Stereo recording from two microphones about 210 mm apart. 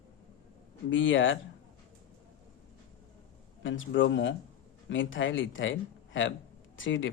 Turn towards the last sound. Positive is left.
turn(degrees=65)  # may be behind; listen again after turning